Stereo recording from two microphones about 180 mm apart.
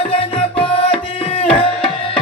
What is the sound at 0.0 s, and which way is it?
Tabla, 30° left (ahead or behind).